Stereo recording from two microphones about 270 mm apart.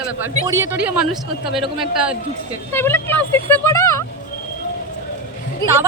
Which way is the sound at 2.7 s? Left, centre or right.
Centre.